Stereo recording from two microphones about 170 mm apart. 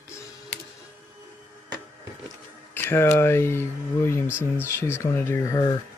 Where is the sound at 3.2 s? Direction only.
15° left (ahead or behind).